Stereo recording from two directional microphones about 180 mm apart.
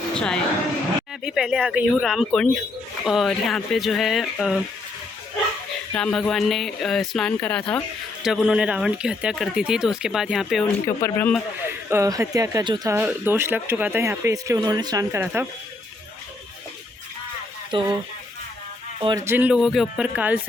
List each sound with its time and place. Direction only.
0.1 s speech: 5° left (ahead or behind)
5.9 s speech: 5° left (ahead or behind)
10.8 s speech: 15° left (ahead or behind)
11.6 s speech: 15° right (ahead or behind)
13.0 s speech: 10° right (ahead or behind)
17.7 s speech: 25° right (ahead or behind)
19.0 s speech: 15° right (ahead or behind)